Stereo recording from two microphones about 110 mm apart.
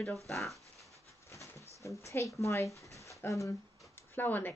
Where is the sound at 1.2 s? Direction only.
25° left (ahead or behind).